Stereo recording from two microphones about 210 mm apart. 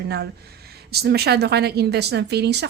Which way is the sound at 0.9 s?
50° right (ahead or behind).